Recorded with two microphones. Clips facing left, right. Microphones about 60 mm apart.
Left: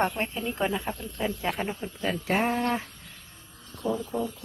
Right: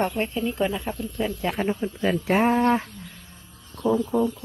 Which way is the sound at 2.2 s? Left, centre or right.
Right.